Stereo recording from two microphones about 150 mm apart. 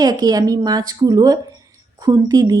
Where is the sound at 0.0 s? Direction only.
25° right (ahead or behind).